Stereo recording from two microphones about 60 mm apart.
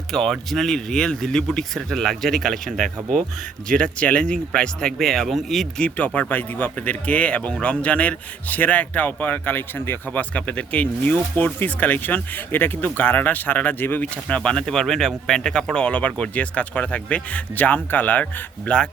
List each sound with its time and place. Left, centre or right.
0.1 s speech: centre
5.8 s speech: left
10.1 s speech: left
14.3 s speech: centre